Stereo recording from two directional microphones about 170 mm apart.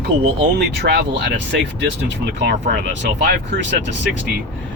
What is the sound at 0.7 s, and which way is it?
Speech, 80° right.